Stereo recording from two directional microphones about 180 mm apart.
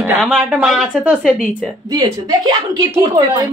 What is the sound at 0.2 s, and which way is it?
Speech, 5° right (ahead or behind).